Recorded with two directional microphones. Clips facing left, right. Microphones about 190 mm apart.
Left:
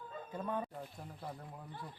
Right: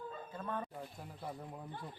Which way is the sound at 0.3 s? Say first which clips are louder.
Left 3 dB; 15° left (ahead or behind).